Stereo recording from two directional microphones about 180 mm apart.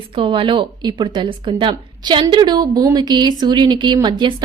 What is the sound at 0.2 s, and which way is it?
Speech, 30° right (ahead or behind).